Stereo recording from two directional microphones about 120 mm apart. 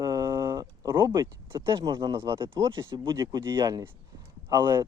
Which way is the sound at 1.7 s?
40° right (ahead or behind).